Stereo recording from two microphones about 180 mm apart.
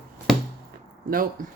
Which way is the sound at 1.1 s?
50° right (ahead or behind).